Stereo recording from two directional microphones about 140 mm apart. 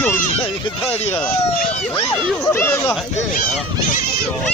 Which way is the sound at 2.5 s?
15° left (ahead or behind).